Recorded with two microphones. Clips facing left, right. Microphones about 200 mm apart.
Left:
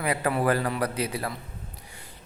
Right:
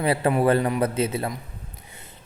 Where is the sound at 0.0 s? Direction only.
30° right (ahead or behind).